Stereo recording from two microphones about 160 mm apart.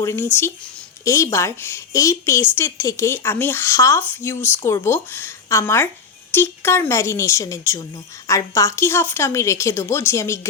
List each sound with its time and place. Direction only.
0.0 s speech: 15° left (ahead or behind)